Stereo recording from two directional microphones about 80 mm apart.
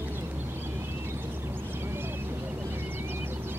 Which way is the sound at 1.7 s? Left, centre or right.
Right.